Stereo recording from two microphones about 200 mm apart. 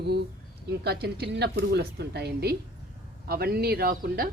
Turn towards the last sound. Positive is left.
turn(degrees=-50)  # may be behind; listen again after turning